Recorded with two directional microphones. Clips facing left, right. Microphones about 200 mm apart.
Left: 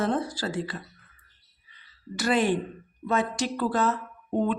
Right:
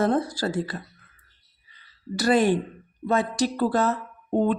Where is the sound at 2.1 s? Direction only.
40° right (ahead or behind).